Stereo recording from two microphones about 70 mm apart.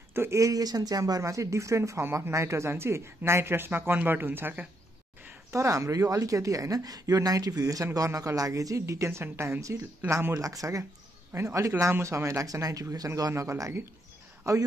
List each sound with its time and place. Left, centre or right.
0.1 s speech: right
0.4 s speech: right
5.5 s a woman's voice: right
9.6 s a woman's voice: right
13.3 s a woman's voice: right